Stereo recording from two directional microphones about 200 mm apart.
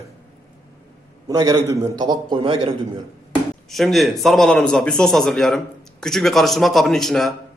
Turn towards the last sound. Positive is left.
turn(degrees=0)  # may be behind; listen again after turning